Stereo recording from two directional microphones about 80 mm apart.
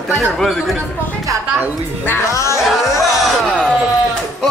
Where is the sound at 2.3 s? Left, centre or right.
Left.